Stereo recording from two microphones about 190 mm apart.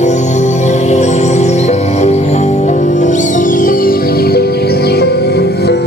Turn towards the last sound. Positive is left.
turn(degrees=60)  # may be behind; listen again after turning